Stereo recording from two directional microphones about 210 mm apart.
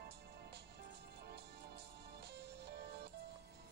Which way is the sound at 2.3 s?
50° right (ahead or behind).